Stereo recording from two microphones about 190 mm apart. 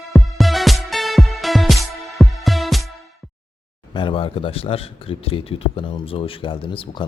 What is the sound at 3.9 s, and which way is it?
A man's voice, 25° left (ahead or behind).